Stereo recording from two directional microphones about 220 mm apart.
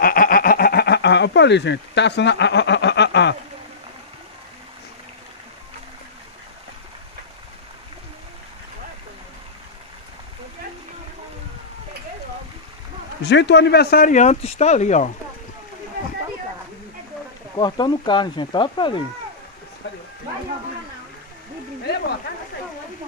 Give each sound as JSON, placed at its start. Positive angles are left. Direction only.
{"t": 0.0, "sound": "a sound", "side_deg": 40}
{"t": 13.2, "sound": "speech", "side_deg": 50}
{"t": 17.6, "sound": "speech", "side_deg": 20}